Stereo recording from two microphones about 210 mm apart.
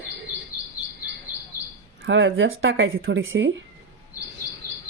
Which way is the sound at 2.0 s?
65° right (ahead or behind).